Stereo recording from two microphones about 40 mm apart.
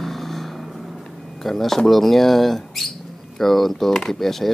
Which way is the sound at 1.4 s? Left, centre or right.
Centre.